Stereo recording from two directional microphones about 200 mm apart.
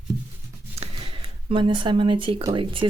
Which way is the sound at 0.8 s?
30° right (ahead or behind).